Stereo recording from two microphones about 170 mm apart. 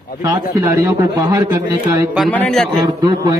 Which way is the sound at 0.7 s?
20° right (ahead or behind).